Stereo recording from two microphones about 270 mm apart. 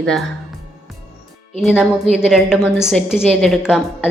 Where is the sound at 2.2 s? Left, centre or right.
Centre.